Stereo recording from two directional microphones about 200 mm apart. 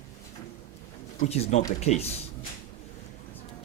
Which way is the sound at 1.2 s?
30° left (ahead or behind).